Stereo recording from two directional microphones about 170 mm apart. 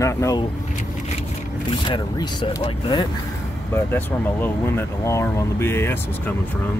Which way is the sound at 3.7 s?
15° left (ahead or behind).